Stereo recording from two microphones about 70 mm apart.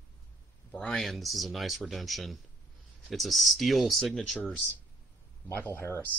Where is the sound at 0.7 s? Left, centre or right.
Centre.